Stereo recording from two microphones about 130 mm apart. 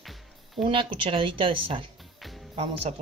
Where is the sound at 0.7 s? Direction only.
40° right (ahead or behind).